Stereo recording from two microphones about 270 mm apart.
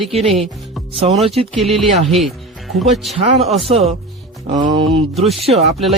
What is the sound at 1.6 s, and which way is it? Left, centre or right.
Speech, centre.